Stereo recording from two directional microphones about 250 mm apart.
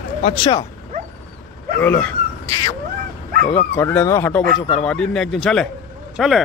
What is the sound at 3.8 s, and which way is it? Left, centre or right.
A man's voice, centre.